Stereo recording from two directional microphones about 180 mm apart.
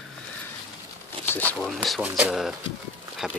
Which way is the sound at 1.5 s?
5° left (ahead or behind).